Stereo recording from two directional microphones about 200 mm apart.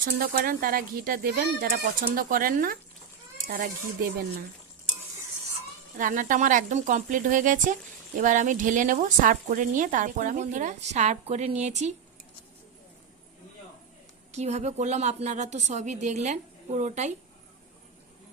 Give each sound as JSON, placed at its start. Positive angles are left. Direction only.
{"t": 0.0, "sound": "a child's voice", "side_deg": -45}
{"t": 6.0, "sound": "speech", "side_deg": -40}
{"t": 14.3, "sound": "speech", "side_deg": -35}